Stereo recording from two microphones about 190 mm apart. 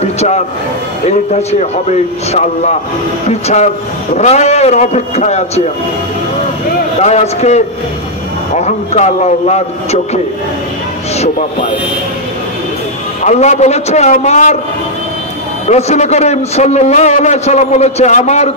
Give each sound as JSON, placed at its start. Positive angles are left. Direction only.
{"t": 0.0, "sound": "music", "side_deg": 35}
{"t": 1.0, "sound": "a man's voice", "side_deg": 35}
{"t": 7.0, "sound": "a man's voice", "side_deg": 35}
{"t": 13.2, "sound": "a man's voice", "side_deg": 35}
{"t": 15.6, "sound": "a man's voice", "side_deg": 35}